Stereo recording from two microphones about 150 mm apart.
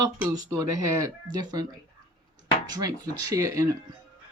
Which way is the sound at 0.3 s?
25° right (ahead or behind).